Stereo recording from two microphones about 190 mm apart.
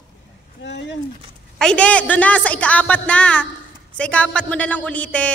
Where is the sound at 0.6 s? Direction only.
65° left (ahead or behind).